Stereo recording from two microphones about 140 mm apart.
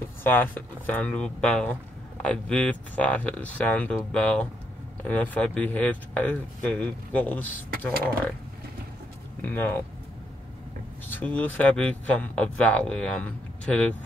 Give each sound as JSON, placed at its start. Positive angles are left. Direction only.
{"t": 0.2, "sound": "speech", "side_deg": 15}
{"t": 9.4, "sound": "speech", "side_deg": 15}
{"t": 11.1, "sound": "speech", "side_deg": 10}